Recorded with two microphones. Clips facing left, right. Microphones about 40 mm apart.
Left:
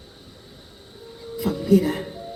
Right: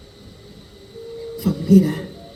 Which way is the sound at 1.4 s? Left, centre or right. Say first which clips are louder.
Right 3 dB; centre.